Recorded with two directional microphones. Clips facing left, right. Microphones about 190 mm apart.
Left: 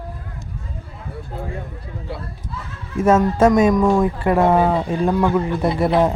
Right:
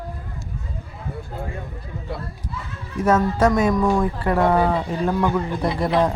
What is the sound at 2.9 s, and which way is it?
Speech, 25° left (ahead or behind).